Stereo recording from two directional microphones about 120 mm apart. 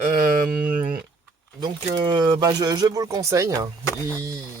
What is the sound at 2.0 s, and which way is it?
Speech, 35° right (ahead or behind).